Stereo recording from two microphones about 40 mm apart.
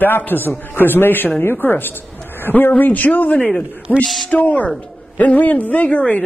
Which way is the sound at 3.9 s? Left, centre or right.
Centre.